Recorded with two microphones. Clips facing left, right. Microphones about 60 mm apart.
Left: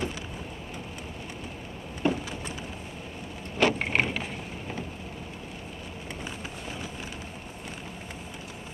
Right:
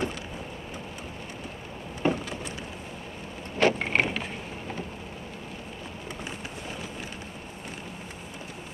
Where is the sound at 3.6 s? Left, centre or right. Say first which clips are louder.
Right 1 dB; right.